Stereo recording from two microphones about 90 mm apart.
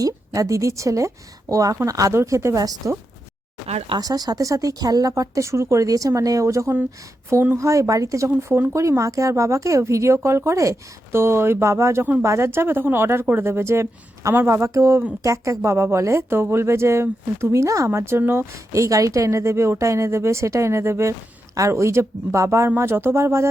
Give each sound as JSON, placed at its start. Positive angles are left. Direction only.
{"t": 0.0, "sound": "a woman's voice", "side_deg": -40}
{"t": 4.0, "sound": "a woman's voice", "side_deg": -45}